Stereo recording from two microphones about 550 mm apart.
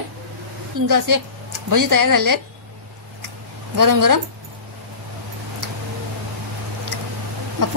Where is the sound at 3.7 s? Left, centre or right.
Right.